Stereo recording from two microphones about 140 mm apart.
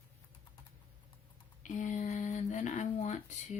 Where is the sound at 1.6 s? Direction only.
60° left (ahead or behind).